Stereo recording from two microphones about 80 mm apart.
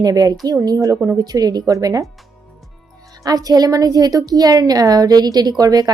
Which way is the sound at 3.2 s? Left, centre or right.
Right.